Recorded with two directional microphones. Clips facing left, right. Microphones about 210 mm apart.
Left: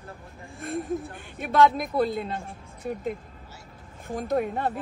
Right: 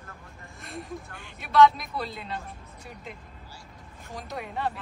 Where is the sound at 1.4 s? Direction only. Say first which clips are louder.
Even; 50° left (ahead or behind).